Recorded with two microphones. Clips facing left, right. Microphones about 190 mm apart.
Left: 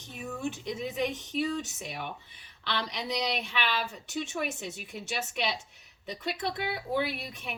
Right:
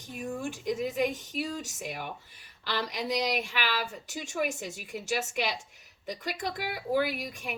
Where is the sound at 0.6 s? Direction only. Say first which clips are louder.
Right 6 dB; 45° right (ahead or behind).